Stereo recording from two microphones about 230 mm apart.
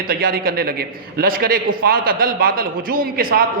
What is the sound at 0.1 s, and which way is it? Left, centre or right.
A man's voice, right.